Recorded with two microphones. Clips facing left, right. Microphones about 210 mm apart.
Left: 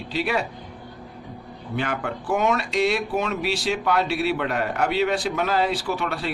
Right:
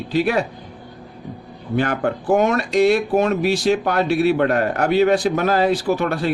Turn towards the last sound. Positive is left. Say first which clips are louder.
# right 7 dB
turn(degrees=-45)  # may be behind; listen again after turning